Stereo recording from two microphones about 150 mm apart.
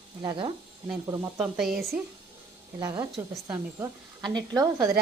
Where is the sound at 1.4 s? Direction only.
5° right (ahead or behind).